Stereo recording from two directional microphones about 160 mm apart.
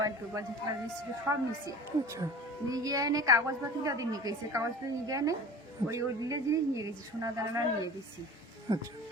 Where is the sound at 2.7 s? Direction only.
20° right (ahead or behind).